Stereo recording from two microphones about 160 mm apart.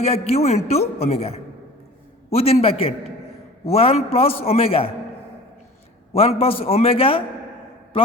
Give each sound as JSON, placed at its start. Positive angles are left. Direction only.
{"t": 0.0, "sound": "a man's voice", "side_deg": 40}
{"t": 6.1, "sound": "a man's voice", "side_deg": 40}